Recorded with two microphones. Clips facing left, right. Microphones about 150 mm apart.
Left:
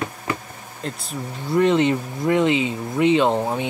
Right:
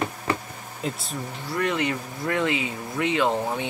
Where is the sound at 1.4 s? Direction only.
25° left (ahead or behind).